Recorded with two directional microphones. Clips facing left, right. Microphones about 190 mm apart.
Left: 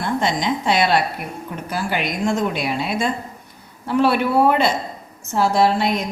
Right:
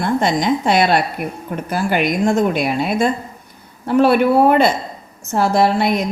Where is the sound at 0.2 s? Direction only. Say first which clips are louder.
Right 4 dB; 50° right (ahead or behind).